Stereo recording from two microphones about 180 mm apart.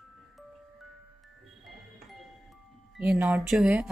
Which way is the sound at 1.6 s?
Centre (ahead or behind).